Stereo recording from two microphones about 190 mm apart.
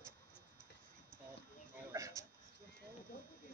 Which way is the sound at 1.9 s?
15° right (ahead or behind).